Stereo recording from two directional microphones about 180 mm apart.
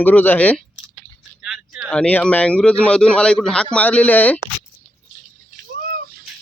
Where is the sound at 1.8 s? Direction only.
5° left (ahead or behind).